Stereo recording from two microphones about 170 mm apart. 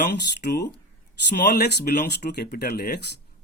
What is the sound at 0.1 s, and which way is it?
Speech, 80° left.